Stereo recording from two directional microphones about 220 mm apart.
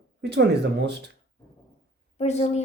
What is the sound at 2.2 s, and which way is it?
Speech, 30° left (ahead or behind).